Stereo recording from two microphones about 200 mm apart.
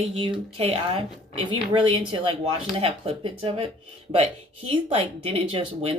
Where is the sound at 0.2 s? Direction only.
25° right (ahead or behind).